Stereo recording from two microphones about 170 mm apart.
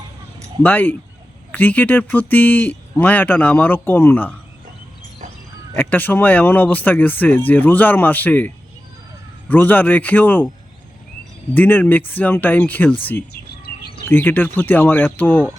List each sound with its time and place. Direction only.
0.6 s speech: 10° left (ahead or behind)
5.7 s speech: 10° left (ahead or behind)
11.5 s speech: 10° left (ahead or behind)
13.3 s bird: 70° left (ahead or behind)
14.1 s speech: 10° left (ahead or behind)